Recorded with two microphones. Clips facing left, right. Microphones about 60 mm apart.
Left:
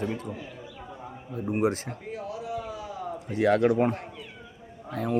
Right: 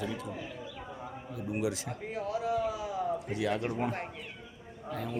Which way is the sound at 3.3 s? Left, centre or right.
Left.